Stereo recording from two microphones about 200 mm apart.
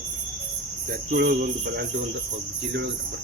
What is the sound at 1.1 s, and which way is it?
Speech, 50° right (ahead or behind).